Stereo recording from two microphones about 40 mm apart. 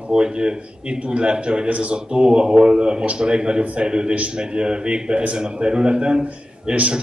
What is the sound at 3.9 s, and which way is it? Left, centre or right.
A man's voice, right.